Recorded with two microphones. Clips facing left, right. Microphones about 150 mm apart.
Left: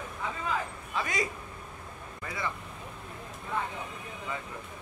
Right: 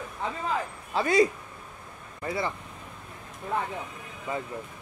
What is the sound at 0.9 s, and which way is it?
Speech, 35° right (ahead or behind).